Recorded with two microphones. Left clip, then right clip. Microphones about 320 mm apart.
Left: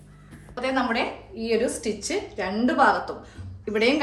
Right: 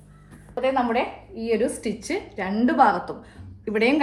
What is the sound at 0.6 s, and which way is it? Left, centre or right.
A woman's voice, centre.